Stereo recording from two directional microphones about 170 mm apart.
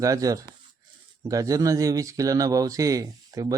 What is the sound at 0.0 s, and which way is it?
Speech, 20° right (ahead or behind).